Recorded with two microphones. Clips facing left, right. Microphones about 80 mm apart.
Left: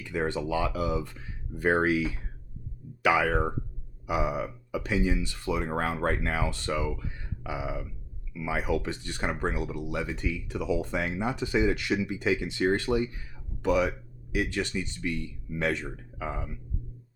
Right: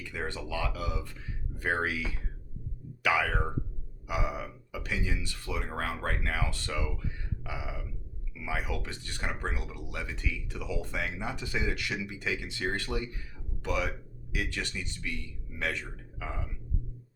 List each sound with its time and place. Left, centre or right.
0.1 s a man's voice: left